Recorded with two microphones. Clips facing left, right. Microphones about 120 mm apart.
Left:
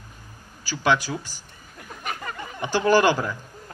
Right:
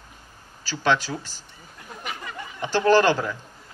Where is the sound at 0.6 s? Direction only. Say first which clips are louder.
Even; 15° left (ahead or behind).